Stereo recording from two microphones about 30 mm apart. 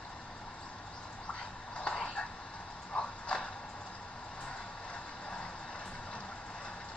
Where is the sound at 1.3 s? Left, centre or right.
Left.